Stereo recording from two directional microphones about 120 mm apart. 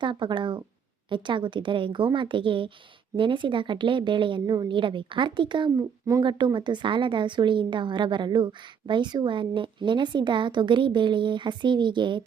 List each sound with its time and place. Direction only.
0.0 s a woman's voice: 40° right (ahead or behind)